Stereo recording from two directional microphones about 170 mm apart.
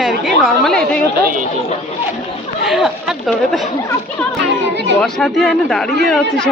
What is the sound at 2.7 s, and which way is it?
Speech, centre (ahead or behind).